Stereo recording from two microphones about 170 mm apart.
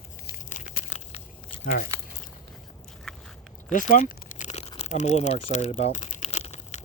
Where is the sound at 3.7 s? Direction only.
45° left (ahead or behind).